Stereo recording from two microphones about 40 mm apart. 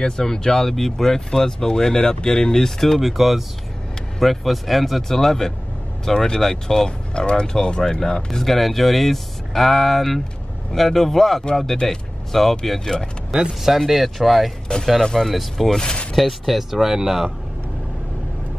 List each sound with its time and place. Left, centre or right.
0.0 s speech: centre
3.0 s speech: centre
7.2 s speech: left; by 12.9 s centre
13.5 s speech: centre
14.7 s speech: left
15.1 s speech: centre
15.7 s speech: centre
16.2 s speech: centre